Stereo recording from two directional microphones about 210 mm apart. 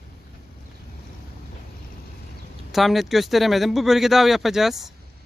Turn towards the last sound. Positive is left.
turn(degrees=0)  # may be behind; listen again after turning